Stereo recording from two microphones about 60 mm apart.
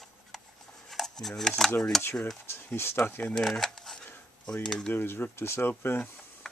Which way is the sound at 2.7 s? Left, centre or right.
Left.